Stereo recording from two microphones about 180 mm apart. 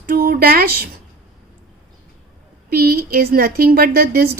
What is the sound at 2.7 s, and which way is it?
A woman's voice, 55° right (ahead or behind).